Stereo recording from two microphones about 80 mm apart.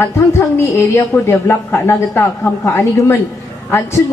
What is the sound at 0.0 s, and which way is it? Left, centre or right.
A man's voice, left.